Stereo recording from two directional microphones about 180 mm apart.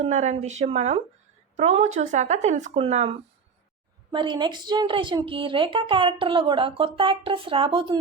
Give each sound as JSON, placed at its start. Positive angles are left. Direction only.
{"t": 0.0, "sound": "speech", "side_deg": -40}
{"t": 4.1, "sound": "a woman's voice", "side_deg": -25}